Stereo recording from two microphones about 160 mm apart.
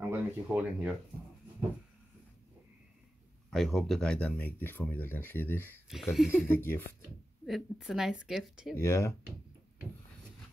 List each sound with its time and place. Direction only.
0.1 s speech: 10° right (ahead or behind)
3.4 s speech: centre (ahead or behind)
5.9 s speech: centre (ahead or behind)
6.4 s speech: 15° left (ahead or behind)
7.4 s speech: centre (ahead or behind)
8.7 s speech: 20° left (ahead or behind)